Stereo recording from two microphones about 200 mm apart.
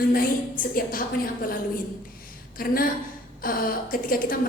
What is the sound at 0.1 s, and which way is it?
A woman's voice, 45° left (ahead or behind).